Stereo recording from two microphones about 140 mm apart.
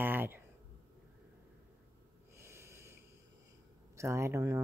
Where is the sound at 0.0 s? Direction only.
15° right (ahead or behind).